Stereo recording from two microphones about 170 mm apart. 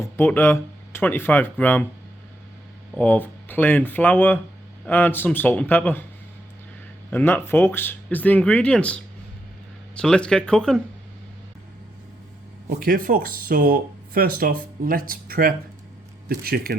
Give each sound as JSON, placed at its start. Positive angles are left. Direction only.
{"t": 0.0, "sound": "speech", "side_deg": 15}
{"t": 2.9, "sound": "speech", "side_deg": 10}
{"t": 7.1, "sound": "speech", "side_deg": 10}
{"t": 12.6, "sound": "speech", "side_deg": -60}